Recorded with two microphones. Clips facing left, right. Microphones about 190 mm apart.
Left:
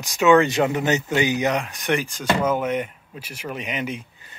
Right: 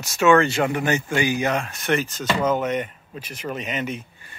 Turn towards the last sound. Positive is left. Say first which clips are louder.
# even
turn(degrees=10)  # may be behind; listen again after turning